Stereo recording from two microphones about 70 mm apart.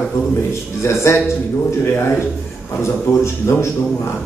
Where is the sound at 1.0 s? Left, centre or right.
Left.